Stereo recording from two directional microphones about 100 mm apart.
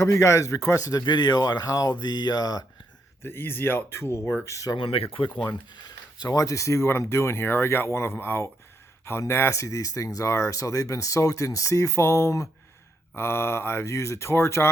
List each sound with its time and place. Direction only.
0.0 s speech: 30° left (ahead or behind)
3.2 s speech: 20° left (ahead or behind)
4.8 s speech: 65° left (ahead or behind)
5.4 s speech: 45° left (ahead or behind); by 14.7 s 25° left (ahead or behind)